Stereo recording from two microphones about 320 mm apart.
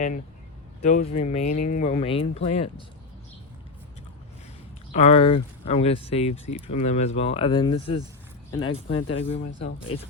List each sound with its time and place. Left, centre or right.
0.8 s speech: left
4.9 s speech: centre